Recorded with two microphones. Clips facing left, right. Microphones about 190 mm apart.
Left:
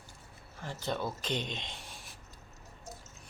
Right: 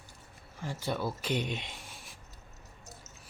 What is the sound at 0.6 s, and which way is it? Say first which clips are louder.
Writing: right 1 dB; 10° right (ahead or behind).